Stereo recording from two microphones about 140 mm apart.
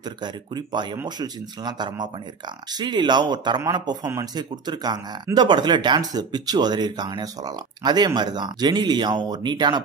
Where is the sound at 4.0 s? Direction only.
15° right (ahead or behind).